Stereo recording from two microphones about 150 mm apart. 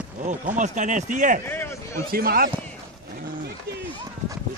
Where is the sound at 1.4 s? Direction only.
15° left (ahead or behind).